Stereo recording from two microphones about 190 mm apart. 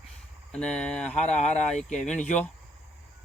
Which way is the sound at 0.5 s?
5° left (ahead or behind).